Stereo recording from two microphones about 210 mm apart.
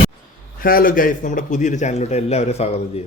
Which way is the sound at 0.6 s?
45° left (ahead or behind).